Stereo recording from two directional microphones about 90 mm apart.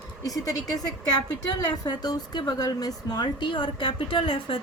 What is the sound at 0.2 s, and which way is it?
Speech, 40° left (ahead or behind).